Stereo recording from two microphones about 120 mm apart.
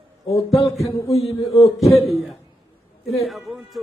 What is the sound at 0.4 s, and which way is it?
A man's voice, 55° left (ahead or behind).